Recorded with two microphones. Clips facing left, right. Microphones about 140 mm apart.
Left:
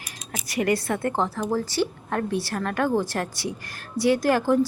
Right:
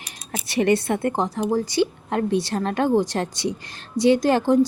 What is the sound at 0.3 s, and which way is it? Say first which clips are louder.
Speech: right 4 dB; 30° right (ahead or behind).